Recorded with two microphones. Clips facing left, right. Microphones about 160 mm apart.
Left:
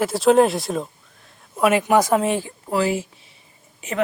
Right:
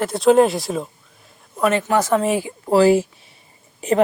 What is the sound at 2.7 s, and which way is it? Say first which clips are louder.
Speech: right 8 dB; 35° right (ahead or behind).